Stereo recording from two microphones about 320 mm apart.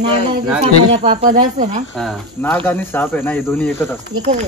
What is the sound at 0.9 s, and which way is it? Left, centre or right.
Speech, centre.